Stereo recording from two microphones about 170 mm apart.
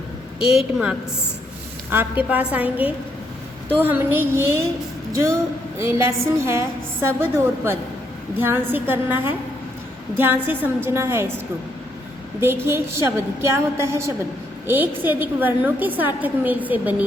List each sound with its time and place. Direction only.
0.4 s a woman's voice: 5° right (ahead or behind)
12.4 s a woman's voice: 15° right (ahead or behind)